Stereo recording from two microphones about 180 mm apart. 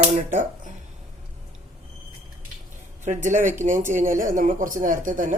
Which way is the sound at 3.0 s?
45° right (ahead or behind).